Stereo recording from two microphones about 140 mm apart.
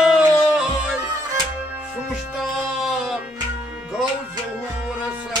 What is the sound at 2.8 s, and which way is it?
Music, 5° right (ahead or behind).